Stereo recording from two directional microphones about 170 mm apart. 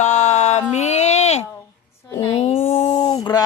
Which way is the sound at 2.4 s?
35° left (ahead or behind).